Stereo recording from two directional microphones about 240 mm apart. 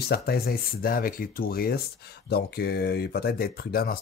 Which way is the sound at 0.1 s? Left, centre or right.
Left.